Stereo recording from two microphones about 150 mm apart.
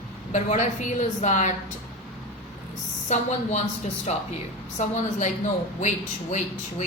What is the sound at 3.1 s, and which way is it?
A man's voice, 55° left (ahead or behind).